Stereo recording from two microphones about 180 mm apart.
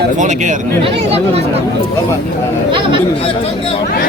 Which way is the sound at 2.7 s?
25° right (ahead or behind).